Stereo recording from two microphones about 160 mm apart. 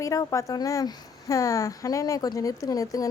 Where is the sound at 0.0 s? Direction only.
20° left (ahead or behind).